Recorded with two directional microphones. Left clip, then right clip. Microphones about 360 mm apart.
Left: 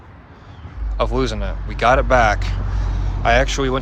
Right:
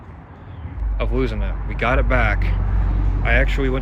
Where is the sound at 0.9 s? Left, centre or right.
Centre.